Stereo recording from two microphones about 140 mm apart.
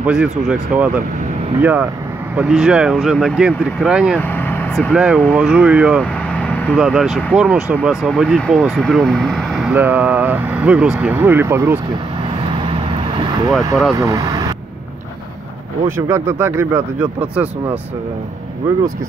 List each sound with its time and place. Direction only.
0.0 s speech: 5° right (ahead or behind)
4.2 s vehicle: 15° left (ahead or behind)
4.9 s speech: 5° right (ahead or behind)
6.3 s vehicle: 10° left (ahead or behind)
6.8 s speech: 5° right (ahead or behind)
9.8 s speech: 15° right (ahead or behind)
12.5 s vehicle: 35° right (ahead or behind)
13.9 s speech: 25° right (ahead or behind)
16.1 s speech: 20° right (ahead or behind)